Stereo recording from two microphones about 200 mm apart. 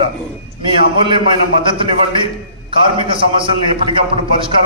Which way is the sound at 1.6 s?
25° right (ahead or behind).